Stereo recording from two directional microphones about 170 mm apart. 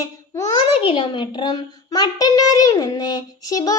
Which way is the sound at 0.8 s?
30° left (ahead or behind).